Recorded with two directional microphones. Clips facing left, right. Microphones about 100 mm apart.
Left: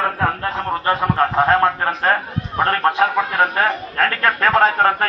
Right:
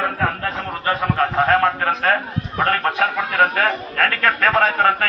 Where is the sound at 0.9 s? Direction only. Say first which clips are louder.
Left 1 dB; 30° left (ahead or behind).